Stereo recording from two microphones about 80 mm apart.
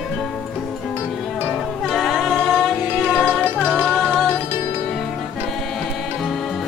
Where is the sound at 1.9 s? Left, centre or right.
Centre.